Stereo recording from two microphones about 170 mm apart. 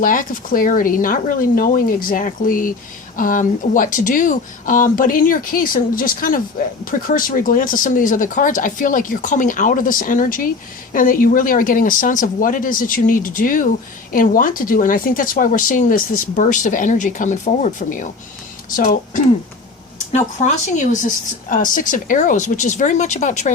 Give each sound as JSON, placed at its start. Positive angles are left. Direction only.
{"t": 0.0, "sound": "speech", "side_deg": 55}